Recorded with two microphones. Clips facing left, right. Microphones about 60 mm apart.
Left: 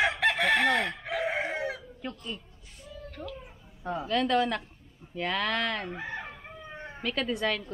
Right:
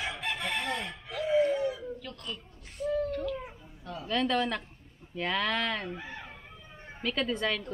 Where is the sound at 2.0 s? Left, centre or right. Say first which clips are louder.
Left 6 dB; left.